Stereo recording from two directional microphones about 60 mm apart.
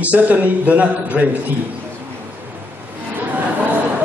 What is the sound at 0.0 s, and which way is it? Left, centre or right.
A man's voice, right.